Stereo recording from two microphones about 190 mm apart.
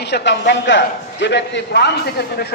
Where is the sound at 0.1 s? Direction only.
65° left (ahead or behind).